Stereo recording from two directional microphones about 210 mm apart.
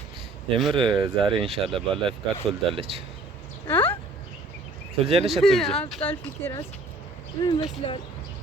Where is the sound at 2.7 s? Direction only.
30° right (ahead or behind).